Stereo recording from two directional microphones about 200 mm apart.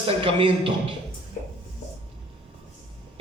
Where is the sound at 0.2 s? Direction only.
25° right (ahead or behind).